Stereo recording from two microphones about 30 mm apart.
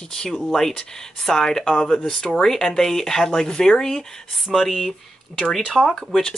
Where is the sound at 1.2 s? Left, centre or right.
Centre.